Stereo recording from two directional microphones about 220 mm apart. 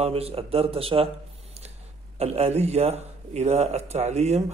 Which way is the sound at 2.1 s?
30° right (ahead or behind).